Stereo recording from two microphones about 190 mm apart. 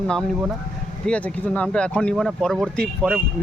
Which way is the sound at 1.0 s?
5° left (ahead or behind).